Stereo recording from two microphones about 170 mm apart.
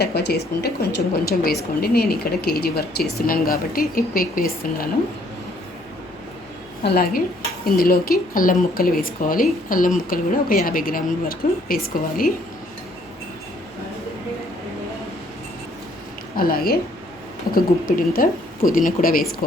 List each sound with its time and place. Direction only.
0.0 s a woman's voice: 70° left (ahead or behind)
6.8 s a woman's voice: 65° left (ahead or behind)
16.4 s a woman's voice: 60° left (ahead or behind)